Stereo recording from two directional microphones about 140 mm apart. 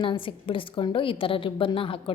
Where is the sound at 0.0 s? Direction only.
40° left (ahead or behind).